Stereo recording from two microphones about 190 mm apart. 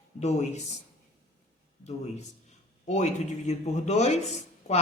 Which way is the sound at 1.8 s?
35° left (ahead or behind).